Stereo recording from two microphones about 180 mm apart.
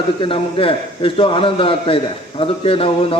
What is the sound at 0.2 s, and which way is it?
A man's voice, 30° left (ahead or behind).